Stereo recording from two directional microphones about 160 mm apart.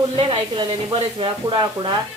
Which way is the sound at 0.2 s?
30° right (ahead or behind).